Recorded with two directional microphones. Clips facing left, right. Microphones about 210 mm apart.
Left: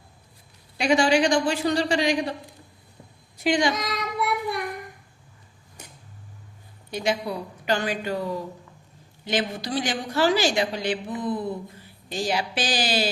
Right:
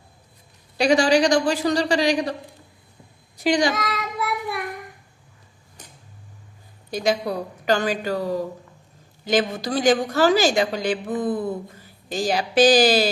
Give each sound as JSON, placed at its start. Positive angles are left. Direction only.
{"t": 0.8, "sound": "a woman's voice", "side_deg": -35}
{"t": 3.4, "sound": "a woman's voice", "side_deg": -35}
{"t": 3.8, "sound": "child singing", "side_deg": 0}
{"t": 6.9, "sound": "a woman's voice", "side_deg": -40}